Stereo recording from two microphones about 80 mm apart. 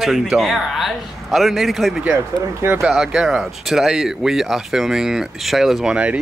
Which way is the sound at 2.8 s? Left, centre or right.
Centre.